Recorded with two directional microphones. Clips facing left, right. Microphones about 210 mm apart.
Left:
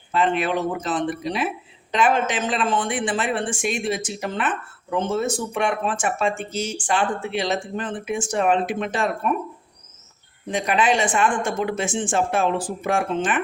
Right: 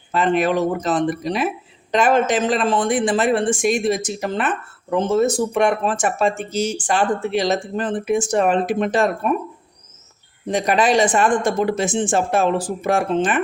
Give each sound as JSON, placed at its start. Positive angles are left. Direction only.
{"t": 0.1, "sound": "a man's voice", "side_deg": -40}
{"t": 10.5, "sound": "a man's voice", "side_deg": -40}